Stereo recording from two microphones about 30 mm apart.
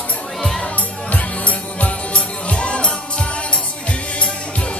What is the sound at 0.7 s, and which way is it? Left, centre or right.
Music, left.